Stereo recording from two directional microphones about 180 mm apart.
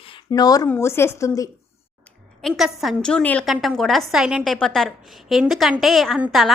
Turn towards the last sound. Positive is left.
turn(degrees=0)  # may be behind; listen again after turning